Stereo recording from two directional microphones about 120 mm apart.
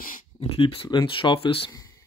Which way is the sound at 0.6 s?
45° left (ahead or behind).